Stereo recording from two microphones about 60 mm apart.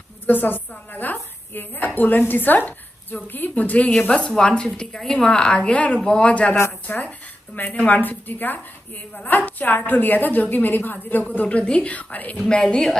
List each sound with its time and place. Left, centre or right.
0.3 s a woman's voice: left
4.1 s a woman's voice: centre